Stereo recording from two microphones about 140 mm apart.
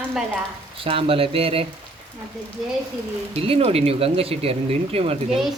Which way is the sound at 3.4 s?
45° right (ahead or behind).